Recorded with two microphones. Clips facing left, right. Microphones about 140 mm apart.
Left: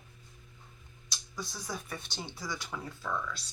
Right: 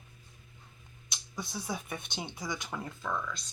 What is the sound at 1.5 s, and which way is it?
Speech, 20° right (ahead or behind).